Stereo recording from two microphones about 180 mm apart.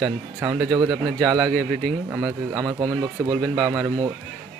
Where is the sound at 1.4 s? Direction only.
Centre (ahead or behind).